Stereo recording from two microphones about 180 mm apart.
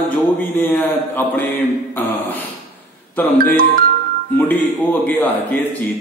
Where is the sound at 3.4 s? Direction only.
55° right (ahead or behind).